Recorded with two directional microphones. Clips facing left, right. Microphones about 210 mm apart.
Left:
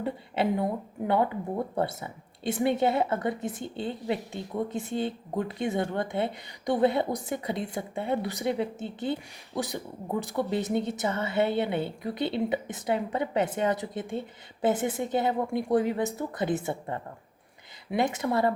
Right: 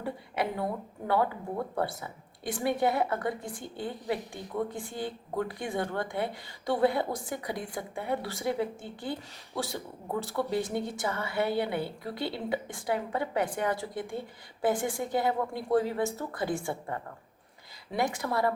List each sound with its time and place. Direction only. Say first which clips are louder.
0.0 s speech: left 4 dB; 20° left (ahead or behind)